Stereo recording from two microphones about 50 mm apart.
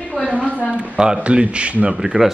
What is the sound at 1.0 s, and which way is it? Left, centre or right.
Speech, centre.